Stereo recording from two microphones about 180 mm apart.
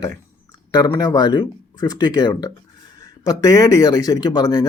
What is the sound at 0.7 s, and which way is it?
Speech, 20° left (ahead or behind).